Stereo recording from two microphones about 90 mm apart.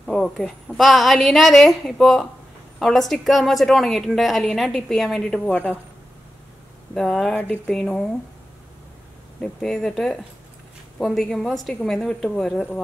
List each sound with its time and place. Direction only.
0.0 s a woman's voice: 5° left (ahead or behind)
5.5 s speech: 15° left (ahead or behind)
6.9 s a woman's voice: 5° left (ahead or behind)
7.3 s speech: 15° left (ahead or behind)
7.7 s speech: 5° left (ahead or behind)
9.4 s a woman's voice: 5° left (ahead or behind)